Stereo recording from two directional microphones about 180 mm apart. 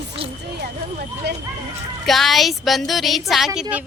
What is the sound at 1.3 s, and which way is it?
Speech, 70° right (ahead or behind).